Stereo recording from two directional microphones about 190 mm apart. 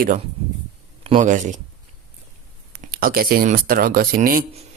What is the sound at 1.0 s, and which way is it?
Speech, 35° right (ahead or behind).